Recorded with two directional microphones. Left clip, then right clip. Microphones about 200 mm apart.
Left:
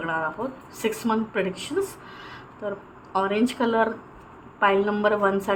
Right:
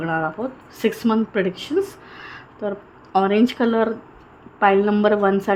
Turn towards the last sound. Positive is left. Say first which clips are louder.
# right 4 dB
turn(degrees=-30)  # may be behind; listen again after turning